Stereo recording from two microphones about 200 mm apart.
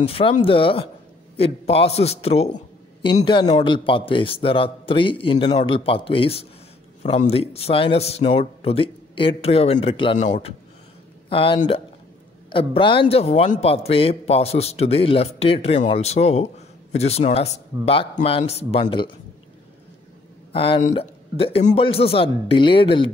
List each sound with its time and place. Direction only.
0.0 s a man's voice: 30° left (ahead or behind)
10.1 s a man's voice: 35° left (ahead or behind)
20.5 s speech: 25° left (ahead or behind)